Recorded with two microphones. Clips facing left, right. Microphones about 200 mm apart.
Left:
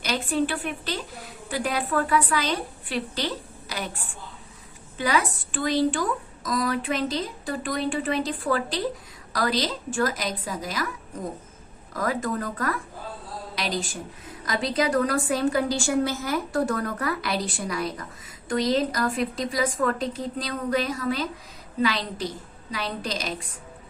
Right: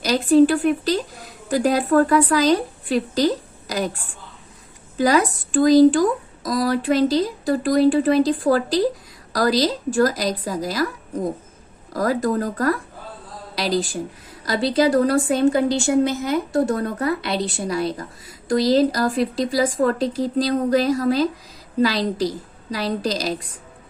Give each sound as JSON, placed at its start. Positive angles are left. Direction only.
{"t": 0.0, "sound": "a woman's voice", "side_deg": -40}
{"t": 4.9, "sound": "a woman's voice", "side_deg": -40}
{"t": 11.9, "sound": "a woman's voice", "side_deg": -40}